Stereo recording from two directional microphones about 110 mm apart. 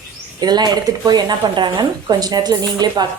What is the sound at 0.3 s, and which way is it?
Speech, 40° right (ahead or behind).